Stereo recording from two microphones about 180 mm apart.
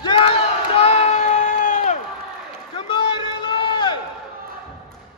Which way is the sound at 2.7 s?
25° left (ahead or behind).